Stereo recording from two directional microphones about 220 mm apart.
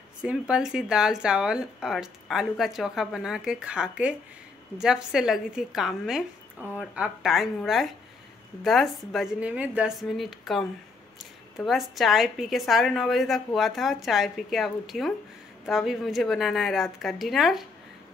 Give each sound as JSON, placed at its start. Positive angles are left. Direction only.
{"t": 0.2, "sound": "speech", "side_deg": -5}